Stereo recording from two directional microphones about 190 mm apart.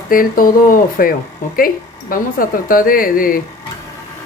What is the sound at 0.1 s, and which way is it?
Speech, 50° left (ahead or behind).